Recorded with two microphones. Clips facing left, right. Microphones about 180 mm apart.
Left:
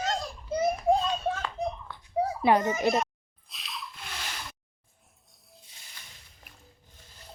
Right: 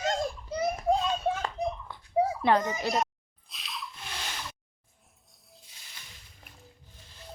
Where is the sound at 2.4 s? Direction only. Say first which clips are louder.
Left 2 dB; 15° left (ahead or behind).